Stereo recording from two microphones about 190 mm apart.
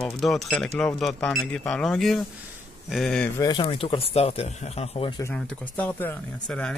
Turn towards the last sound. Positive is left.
turn(degrees=5)  # may be behind; listen again after turning